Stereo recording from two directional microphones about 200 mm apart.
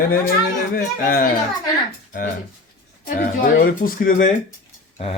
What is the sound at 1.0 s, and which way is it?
Speech, 45° left (ahead or behind).